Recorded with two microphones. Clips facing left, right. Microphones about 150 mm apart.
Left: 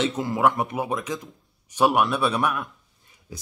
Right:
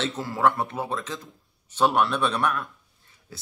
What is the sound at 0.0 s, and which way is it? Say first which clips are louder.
Speech: left 2 dB; 15° left (ahead or behind).